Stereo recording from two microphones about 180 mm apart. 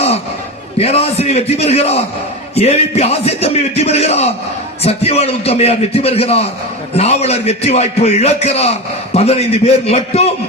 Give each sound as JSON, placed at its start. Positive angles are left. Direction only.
{"t": 0.8, "sound": "a man's voice", "side_deg": 35}